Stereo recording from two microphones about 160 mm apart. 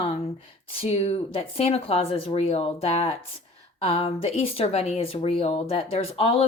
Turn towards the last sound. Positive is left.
turn(degrees=35)  # may be behind; listen again after turning